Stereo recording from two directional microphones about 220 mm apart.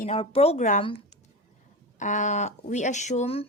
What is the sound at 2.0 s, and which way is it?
A woman's voice, 35° left (ahead or behind).